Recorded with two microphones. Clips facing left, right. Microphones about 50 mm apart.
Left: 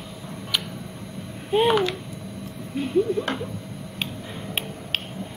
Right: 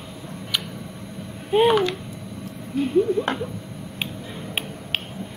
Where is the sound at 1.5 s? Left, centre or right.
Centre.